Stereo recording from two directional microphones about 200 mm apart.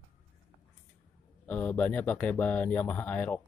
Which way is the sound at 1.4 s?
5° left (ahead or behind).